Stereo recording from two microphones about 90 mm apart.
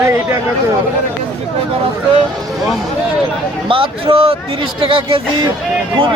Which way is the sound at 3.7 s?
75° right (ahead or behind).